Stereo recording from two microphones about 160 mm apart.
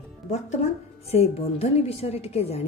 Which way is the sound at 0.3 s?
45° left (ahead or behind).